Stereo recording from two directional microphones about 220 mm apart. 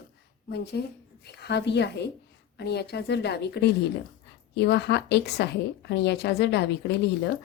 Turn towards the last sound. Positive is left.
turn(degrees=50)  # may be behind; listen again after turning